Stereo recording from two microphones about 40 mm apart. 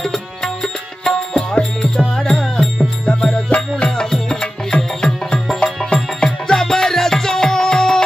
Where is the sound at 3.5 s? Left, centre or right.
Left.